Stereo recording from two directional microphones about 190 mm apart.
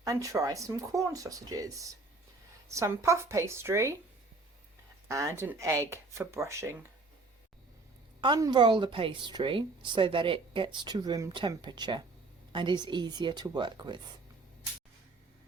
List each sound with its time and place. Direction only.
0.0 s speech: 15° right (ahead or behind)
5.0 s speech: 15° right (ahead or behind)
8.2 s a woman's voice: 25° right (ahead or behind)